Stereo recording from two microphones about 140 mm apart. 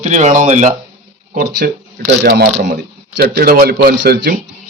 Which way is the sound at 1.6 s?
90° right.